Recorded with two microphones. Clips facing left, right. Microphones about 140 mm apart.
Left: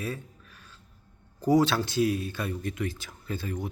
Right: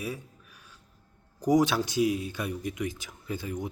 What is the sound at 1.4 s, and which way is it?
Speech, 15° right (ahead or behind).